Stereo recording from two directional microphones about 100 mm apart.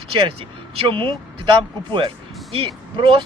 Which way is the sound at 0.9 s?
60° right (ahead or behind).